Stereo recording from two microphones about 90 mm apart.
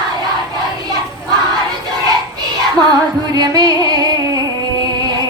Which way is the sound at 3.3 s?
50° right (ahead or behind).